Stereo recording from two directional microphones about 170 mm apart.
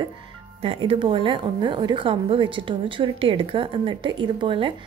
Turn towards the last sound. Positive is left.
turn(degrees=-30)  # may be behind; listen again after turning